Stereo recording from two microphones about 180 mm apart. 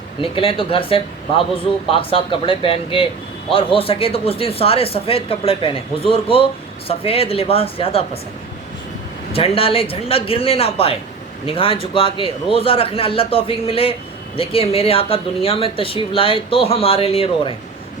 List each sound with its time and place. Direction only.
0.2 s speech: 30° left (ahead or behind)
9.3 s speech: 30° left (ahead or behind)